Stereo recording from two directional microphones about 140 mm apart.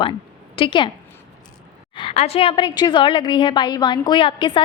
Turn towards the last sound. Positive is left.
turn(degrees=35)  # may be behind; listen again after turning